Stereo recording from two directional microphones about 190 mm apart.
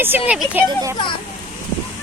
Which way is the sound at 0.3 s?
5° right (ahead or behind).